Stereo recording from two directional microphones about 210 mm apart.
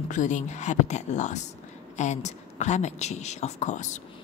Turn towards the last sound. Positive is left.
turn(degrees=35)  # may be behind; listen again after turning